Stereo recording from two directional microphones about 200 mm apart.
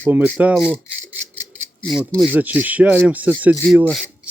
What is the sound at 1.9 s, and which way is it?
Speech, centre (ahead or behind).